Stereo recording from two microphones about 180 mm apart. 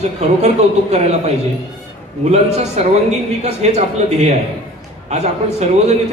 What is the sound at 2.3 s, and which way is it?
A man's voice, 35° right (ahead or behind).